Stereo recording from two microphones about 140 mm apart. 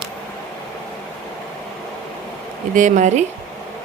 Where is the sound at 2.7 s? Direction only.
65° right (ahead or behind).